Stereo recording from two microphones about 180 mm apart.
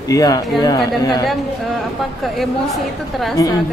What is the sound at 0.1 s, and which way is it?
Speech, 20° left (ahead or behind).